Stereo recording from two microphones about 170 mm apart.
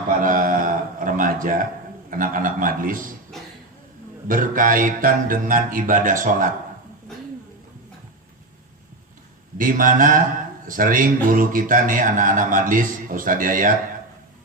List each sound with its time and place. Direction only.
0.2 s mantra: 55° right (ahead or behind)
2.0 s a man's voice: 55° right (ahead or behind)
4.3 s a man's voice: 55° right (ahead or behind)
9.6 s a man's voice: 55° right (ahead or behind)